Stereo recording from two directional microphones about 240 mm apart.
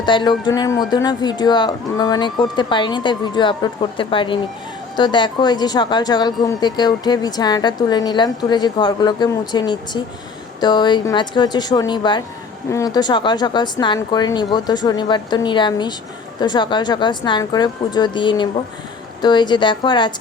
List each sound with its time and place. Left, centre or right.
0.0 s a woman's voice: centre